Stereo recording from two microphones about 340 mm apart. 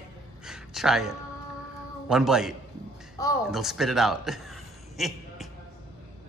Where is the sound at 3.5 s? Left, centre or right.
Centre.